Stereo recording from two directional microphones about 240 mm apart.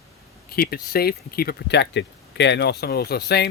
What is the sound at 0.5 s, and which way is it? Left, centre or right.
Speech, left.